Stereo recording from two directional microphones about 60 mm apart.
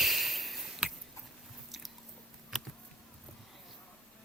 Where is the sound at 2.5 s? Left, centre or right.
Centre.